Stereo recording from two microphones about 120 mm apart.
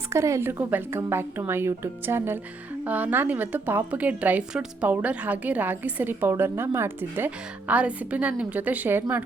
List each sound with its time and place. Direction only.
0.1 s a woman's voice: 25° right (ahead or behind)